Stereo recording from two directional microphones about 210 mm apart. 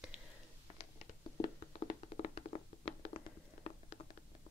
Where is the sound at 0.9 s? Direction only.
30° left (ahead or behind).